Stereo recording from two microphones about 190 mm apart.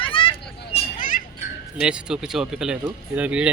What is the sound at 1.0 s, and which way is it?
Children playing, 45° left (ahead or behind).